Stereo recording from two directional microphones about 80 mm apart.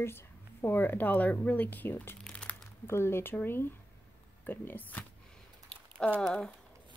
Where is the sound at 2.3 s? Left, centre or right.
Centre.